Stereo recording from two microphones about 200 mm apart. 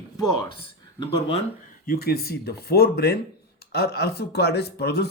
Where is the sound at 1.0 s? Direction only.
25° left (ahead or behind).